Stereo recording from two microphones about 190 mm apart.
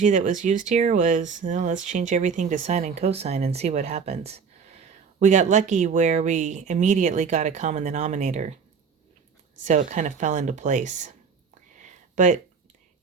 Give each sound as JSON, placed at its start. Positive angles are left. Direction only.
{"t": 0.0, "sound": "speech", "side_deg": -40}
{"t": 9.6, "sound": "speech", "side_deg": -40}
{"t": 11.7, "sound": "a sound", "side_deg": -40}